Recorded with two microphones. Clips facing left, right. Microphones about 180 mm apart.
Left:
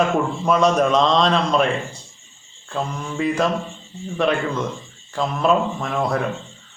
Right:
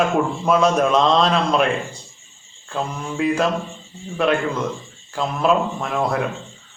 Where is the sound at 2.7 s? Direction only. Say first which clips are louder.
Even; 5° right (ahead or behind).